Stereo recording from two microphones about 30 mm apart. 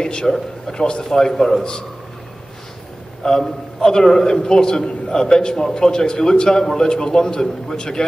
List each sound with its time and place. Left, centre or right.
0.0 s a man's voice: left
1.0 s a man's voice: centre
3.2 s a man's voice: left
6.6 s a man's voice: centre
6.9 s a man's voice: left